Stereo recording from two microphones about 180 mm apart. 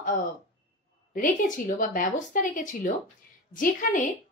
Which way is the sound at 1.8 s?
50° left (ahead or behind).